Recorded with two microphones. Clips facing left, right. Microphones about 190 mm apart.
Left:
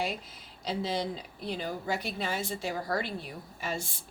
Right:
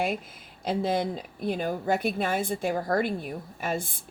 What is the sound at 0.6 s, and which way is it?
A woman's voice, 50° right (ahead or behind).